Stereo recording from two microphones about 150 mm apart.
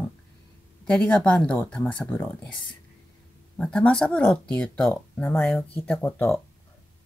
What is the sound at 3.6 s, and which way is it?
Speech, 5° left (ahead or behind).